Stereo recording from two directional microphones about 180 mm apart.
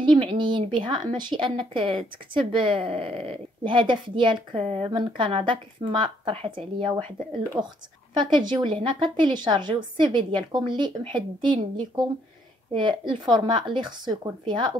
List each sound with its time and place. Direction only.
0.0 s speech: 30° right (ahead or behind)
8.2 s speech: 25° right (ahead or behind)